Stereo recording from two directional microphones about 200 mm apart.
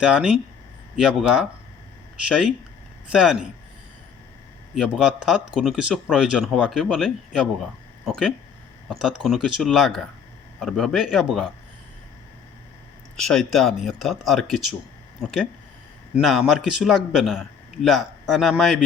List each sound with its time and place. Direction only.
0.0 s speech: 5° right (ahead or behind)
4.7 s speech: centre (ahead or behind)
13.1 s speech: centre (ahead or behind)